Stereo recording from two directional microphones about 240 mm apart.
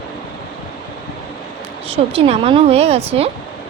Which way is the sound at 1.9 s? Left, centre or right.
Right.